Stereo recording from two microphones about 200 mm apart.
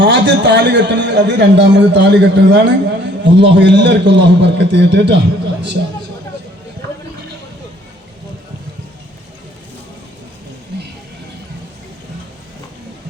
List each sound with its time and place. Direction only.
0.0 s a man's voice: 60° right (ahead or behind)